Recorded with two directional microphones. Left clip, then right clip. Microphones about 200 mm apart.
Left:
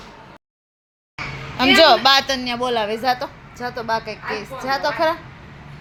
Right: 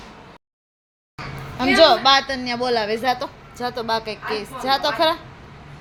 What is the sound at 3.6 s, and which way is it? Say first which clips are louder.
Speech: even; 20° right (ahead or behind).